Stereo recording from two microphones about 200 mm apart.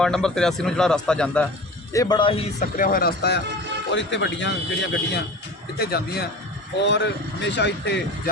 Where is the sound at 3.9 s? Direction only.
65° left (ahead or behind).